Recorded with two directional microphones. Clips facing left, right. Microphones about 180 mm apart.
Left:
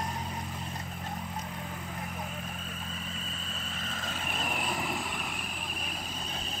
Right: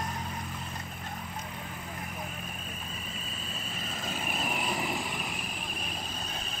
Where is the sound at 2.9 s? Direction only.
10° right (ahead or behind).